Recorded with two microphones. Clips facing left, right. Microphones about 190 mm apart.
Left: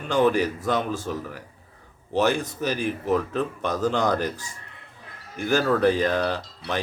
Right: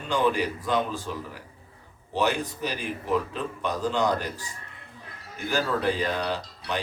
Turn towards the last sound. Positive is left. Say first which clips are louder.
# left 2 dB
turn(degrees=45)  # may be behind; listen again after turning